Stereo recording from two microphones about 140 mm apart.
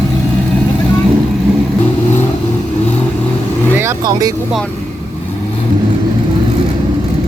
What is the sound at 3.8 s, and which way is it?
Vehicle, 20° right (ahead or behind).